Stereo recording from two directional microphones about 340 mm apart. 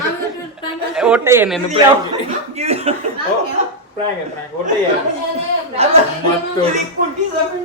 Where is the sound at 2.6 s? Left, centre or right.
Centre.